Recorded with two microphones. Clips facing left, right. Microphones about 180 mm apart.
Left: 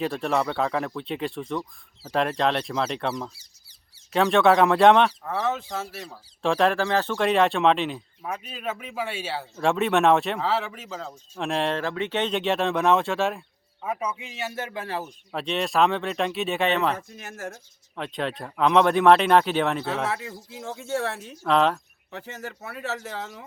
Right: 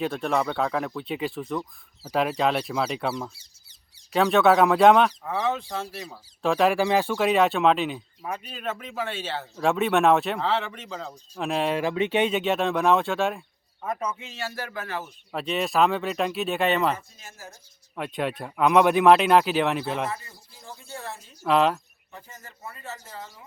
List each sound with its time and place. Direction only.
0.0 s speech: centre (ahead or behind)
3.3 s a sound: 20° right (ahead or behind)
4.1 s speech: centre (ahead or behind)
9.6 s speech: centre (ahead or behind)
11.8 s a man's voice: 15° right (ahead or behind); by 15.1 s 30° left (ahead or behind)
15.3 s speech: centre (ahead or behind)
17.2 s speech: 70° left (ahead or behind)
17.9 s speech: 5° right (ahead or behind)
20.1 s speech: 80° left
21.4 s speech: 5° right (ahead or behind)
22.1 s speech: 75° left (ahead or behind)